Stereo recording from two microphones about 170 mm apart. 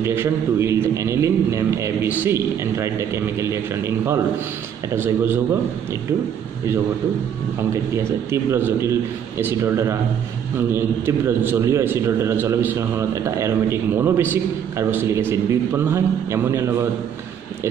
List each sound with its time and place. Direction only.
0.0 s a man's voice: 15° right (ahead or behind)
7.7 s a man's voice: 15° right (ahead or behind)